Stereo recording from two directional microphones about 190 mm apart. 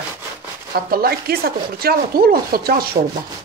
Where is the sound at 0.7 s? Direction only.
55° right (ahead or behind).